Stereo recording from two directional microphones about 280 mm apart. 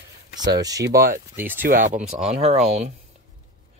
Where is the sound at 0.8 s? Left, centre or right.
Right.